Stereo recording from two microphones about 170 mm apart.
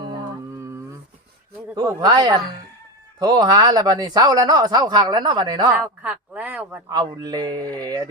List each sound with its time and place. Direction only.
1.7 s speech: 25° right (ahead or behind)
6.0 s speech: 10° right (ahead or behind)
6.9 s speech: 25° right (ahead or behind)